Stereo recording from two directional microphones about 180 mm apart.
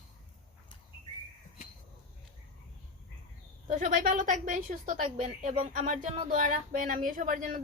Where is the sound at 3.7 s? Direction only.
45° right (ahead or behind).